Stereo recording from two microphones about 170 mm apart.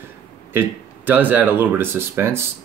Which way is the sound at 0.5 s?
10° right (ahead or behind).